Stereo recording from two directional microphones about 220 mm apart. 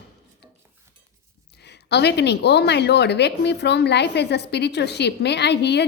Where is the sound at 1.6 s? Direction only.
50° left (ahead or behind).